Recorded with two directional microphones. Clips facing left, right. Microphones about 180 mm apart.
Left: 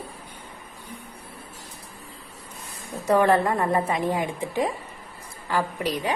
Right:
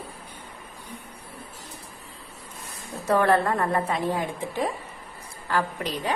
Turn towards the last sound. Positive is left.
turn(degrees=10)  # may be behind; listen again after turning